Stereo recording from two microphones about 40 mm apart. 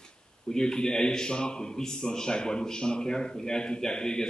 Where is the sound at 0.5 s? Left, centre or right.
Centre.